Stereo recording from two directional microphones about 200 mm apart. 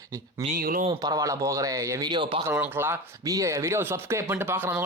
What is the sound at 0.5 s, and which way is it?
Speech, 45° right (ahead or behind).